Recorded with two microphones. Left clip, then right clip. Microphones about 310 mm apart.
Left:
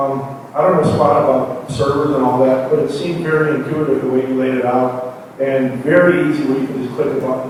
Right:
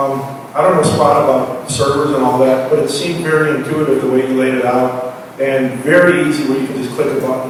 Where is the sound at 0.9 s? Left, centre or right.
Left.